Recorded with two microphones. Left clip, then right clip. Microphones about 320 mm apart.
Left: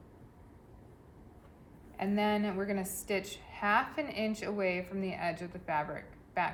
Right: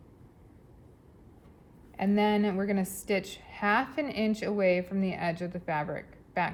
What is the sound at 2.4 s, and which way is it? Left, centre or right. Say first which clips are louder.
A woman's voice: right 4 dB; right.